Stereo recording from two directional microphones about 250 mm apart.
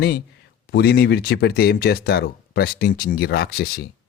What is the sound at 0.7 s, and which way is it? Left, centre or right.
Speech, left.